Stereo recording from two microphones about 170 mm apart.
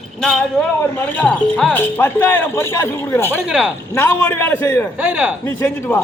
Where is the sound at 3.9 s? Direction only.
15° left (ahead or behind).